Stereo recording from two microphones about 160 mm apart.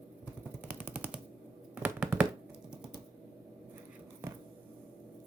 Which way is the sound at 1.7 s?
10° right (ahead or behind).